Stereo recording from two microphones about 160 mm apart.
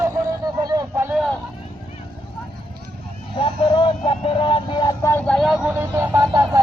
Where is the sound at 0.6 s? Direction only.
25° right (ahead or behind).